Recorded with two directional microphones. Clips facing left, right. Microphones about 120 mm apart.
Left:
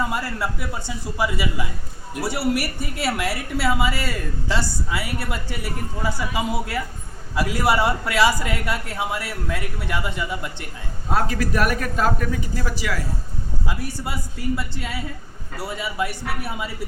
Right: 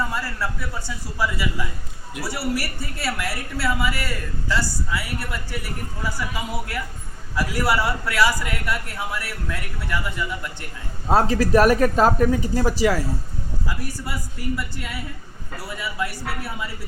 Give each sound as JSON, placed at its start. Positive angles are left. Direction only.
{"t": 0.0, "sound": "a woman's voice", "side_deg": 20}
{"t": 11.1, "sound": "speech", "side_deg": -35}
{"t": 13.7, "sound": "a woman's voice", "side_deg": 25}